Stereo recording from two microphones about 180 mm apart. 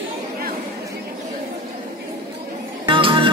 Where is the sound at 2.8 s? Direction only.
30° right (ahead or behind).